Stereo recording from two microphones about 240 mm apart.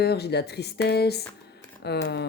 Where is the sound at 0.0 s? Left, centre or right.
Left.